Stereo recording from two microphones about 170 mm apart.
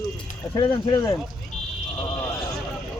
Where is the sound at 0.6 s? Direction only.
25° left (ahead or behind).